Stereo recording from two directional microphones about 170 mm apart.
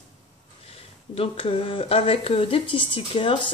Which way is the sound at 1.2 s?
35° left (ahead or behind).